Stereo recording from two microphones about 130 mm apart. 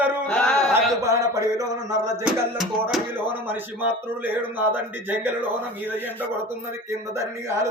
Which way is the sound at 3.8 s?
15° right (ahead or behind).